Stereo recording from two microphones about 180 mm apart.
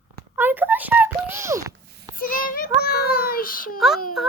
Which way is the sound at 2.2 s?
50° left (ahead or behind).